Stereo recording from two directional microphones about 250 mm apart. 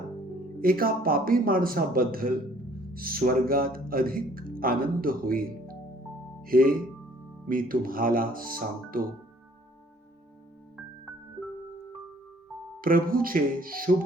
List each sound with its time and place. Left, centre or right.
0.6 s speech: right
12.8 s speech: right